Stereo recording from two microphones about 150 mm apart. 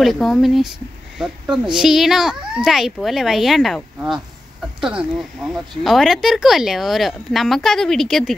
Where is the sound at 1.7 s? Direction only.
Centre (ahead or behind).